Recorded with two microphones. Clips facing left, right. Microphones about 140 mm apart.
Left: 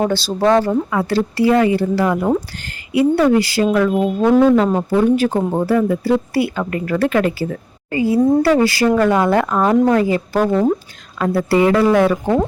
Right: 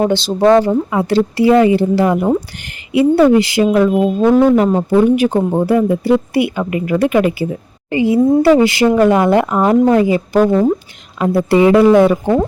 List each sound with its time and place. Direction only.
0.1 s speech: 20° right (ahead or behind)